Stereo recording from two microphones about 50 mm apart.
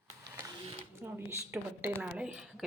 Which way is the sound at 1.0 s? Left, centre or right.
Right.